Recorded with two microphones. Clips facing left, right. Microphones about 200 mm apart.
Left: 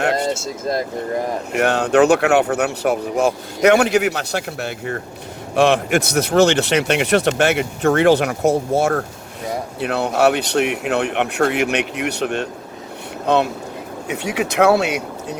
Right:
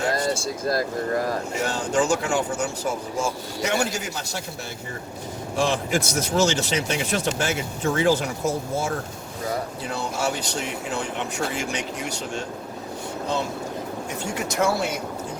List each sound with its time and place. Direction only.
0.2 s speech: 20° left (ahead or behind)
1.5 s speech: 65° left (ahead or behind)